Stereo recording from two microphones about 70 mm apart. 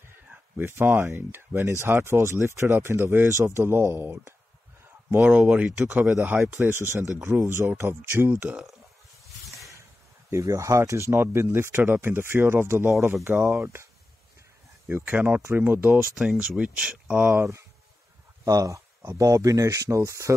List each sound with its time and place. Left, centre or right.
0.3 s speech: right
5.2 s speech: centre
6.4 s speech: right
10.3 s speech: right
14.9 s speech: right
16.2 s speech: centre
17.3 s speech: right
18.4 s speech: right